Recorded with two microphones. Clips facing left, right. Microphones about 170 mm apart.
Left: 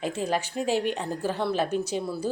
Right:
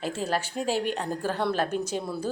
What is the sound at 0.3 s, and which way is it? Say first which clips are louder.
Speech: left 1 dB; 10° left (ahead or behind).